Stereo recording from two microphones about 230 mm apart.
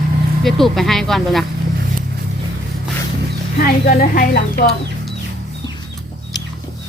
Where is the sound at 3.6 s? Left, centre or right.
Left.